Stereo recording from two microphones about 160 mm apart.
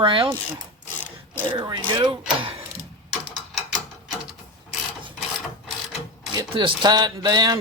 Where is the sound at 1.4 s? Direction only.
30° right (ahead or behind).